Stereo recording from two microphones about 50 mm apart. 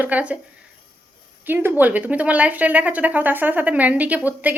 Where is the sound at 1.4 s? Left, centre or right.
Right.